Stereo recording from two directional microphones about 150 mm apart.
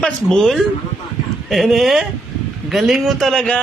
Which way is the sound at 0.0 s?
5° left (ahead or behind).